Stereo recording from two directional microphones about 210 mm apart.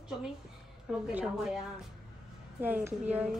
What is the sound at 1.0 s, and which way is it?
Speech, 5° right (ahead or behind).